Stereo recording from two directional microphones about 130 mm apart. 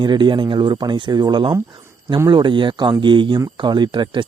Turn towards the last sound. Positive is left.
turn(degrees=-35)  # may be behind; listen again after turning